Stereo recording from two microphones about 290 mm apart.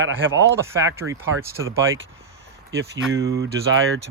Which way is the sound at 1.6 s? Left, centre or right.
Centre.